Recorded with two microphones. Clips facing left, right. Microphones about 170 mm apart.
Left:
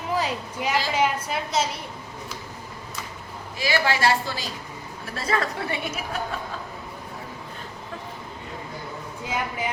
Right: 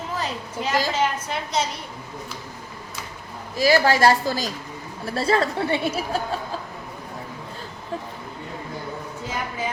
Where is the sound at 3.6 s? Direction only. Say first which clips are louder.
Right 6 dB; 40° right (ahead or behind).